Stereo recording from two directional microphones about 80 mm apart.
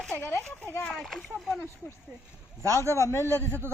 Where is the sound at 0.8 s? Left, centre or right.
Centre.